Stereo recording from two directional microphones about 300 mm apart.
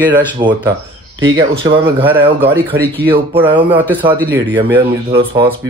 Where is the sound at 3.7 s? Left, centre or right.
Centre.